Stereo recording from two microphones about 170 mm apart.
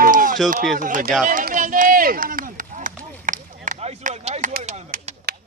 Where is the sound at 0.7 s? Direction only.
55° right (ahead or behind).